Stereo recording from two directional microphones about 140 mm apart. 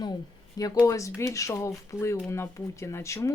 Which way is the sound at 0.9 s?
20° left (ahead or behind).